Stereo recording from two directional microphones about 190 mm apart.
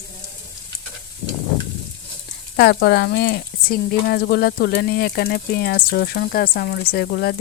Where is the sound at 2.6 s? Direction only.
60° left (ahead or behind).